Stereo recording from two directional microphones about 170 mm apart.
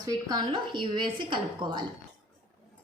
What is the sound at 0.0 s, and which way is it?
A woman's voice, 20° right (ahead or behind).